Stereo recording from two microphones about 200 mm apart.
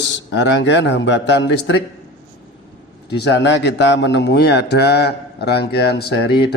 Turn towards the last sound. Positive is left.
turn(degrees=55)  # may be behind; listen again after turning